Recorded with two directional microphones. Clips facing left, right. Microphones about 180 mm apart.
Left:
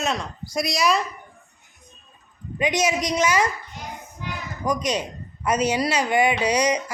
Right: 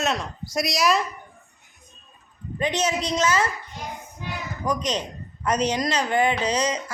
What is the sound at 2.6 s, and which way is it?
Speech, 10° left (ahead or behind).